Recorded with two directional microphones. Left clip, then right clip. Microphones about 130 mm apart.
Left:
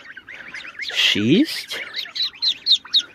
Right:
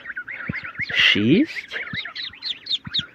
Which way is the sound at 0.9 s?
20° left (ahead or behind).